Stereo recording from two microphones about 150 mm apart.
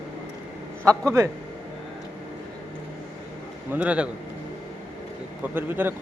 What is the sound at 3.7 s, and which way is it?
Speech, 10° right (ahead or behind).